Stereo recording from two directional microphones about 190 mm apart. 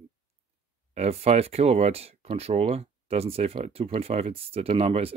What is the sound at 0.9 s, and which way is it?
Speech, 35° right (ahead or behind).